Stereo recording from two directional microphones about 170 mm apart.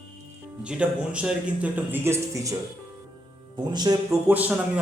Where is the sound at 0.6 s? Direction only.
5° right (ahead or behind).